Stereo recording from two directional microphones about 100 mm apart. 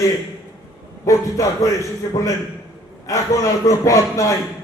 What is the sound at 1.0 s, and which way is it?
Speech, 35° left (ahead or behind).